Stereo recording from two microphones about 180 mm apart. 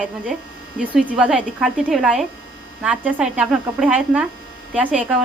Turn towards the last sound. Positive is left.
turn(degrees=-5)  # may be behind; listen again after turning